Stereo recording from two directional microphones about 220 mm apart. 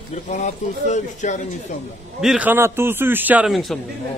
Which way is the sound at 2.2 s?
5° right (ahead or behind).